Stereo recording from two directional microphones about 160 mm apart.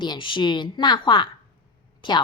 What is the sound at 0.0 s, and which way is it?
A woman's voice, 30° left (ahead or behind).